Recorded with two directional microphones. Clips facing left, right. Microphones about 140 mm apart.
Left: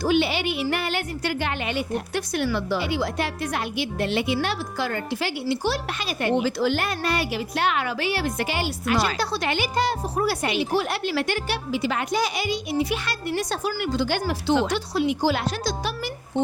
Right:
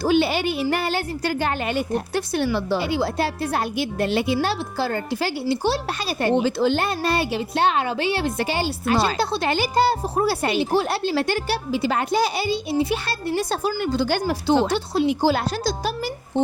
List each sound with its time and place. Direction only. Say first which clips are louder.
0.0 s a woman's voice: right 2 dB; 35° right (ahead or behind)